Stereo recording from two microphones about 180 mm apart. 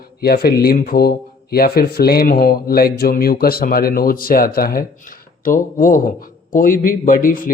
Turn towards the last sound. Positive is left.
turn(degrees=50)  # may be behind; listen again after turning